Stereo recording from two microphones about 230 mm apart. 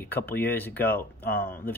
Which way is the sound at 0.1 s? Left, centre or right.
Centre.